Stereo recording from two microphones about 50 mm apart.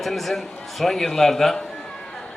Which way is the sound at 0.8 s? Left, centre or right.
Centre.